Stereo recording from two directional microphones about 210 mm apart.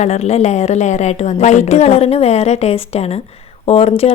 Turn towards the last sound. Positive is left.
turn(degrees=30)  # may be behind; listen again after turning